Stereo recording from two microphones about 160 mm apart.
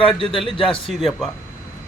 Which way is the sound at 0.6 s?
35° left (ahead or behind).